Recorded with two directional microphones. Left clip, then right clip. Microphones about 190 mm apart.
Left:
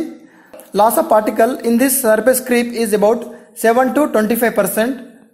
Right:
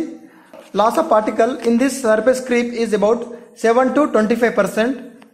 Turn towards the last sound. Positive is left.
turn(degrees=5)  # may be behind; listen again after turning